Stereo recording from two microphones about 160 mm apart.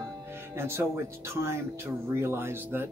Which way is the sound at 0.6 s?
15° right (ahead or behind).